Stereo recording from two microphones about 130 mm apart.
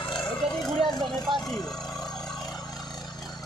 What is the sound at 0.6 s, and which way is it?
Vehicle, centre (ahead or behind).